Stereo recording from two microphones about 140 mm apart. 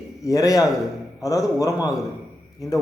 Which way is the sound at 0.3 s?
25° left (ahead or behind).